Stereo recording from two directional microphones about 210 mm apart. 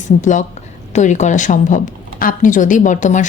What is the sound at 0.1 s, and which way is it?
Speech, 45° left (ahead or behind).